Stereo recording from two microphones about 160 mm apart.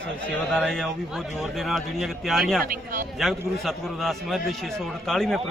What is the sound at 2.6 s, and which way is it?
Speech, 60° right (ahead or behind).